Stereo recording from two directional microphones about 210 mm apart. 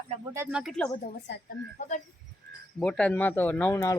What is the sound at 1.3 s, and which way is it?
Speech, 55° left (ahead or behind).